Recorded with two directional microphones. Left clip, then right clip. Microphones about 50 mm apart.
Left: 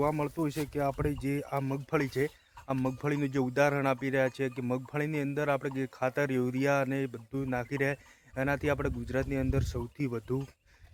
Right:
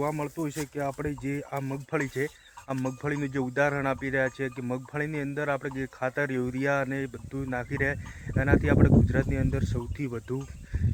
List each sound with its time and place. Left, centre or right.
0.0 s speech: left
0.5 s speech: left